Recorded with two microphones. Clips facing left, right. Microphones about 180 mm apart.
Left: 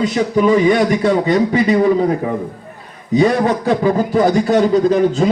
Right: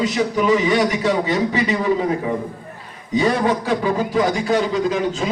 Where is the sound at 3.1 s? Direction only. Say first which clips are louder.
Left 4 dB; 45° left (ahead or behind).